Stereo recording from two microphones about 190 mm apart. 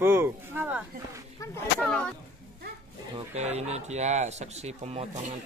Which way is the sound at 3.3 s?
35° right (ahead or behind).